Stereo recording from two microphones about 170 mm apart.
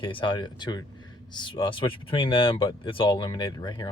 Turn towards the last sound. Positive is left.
turn(degrees=25)  # may be behind; listen again after turning